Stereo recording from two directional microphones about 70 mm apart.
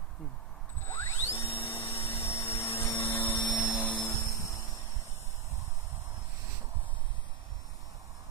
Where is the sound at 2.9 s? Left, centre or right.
Left.